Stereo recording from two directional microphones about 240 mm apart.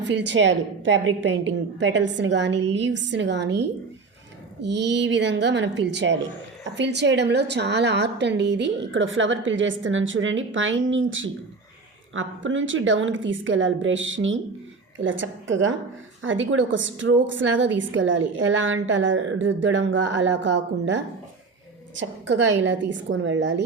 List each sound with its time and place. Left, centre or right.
0.1 s a woman's voice: right